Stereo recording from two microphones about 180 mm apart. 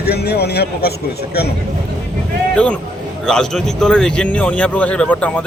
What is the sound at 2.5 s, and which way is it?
A man's voice, 5° left (ahead or behind).